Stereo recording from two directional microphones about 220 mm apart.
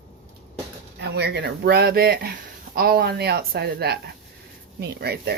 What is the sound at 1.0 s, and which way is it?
Speech, 50° right (ahead or behind).